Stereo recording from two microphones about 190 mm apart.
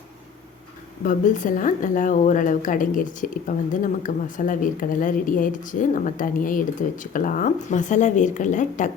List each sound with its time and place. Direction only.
1.0 s a woman's voice: 40° left (ahead or behind)